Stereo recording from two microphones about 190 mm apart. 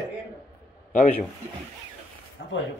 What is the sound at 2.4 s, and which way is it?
Speech, 70° left (ahead or behind).